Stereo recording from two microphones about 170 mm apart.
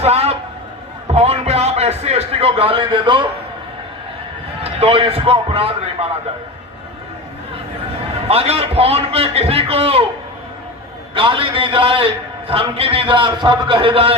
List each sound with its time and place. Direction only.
0.0 s a man's voice: 40° right (ahead or behind)
4.6 s a man's voice: 35° right (ahead or behind)
8.3 s a man's voice: 35° right (ahead or behind)
11.1 s a man's voice: 30° right (ahead or behind)